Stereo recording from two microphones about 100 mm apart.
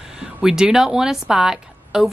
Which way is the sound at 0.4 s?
5° right (ahead or behind).